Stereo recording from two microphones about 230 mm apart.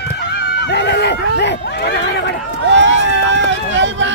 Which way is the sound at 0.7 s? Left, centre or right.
Left.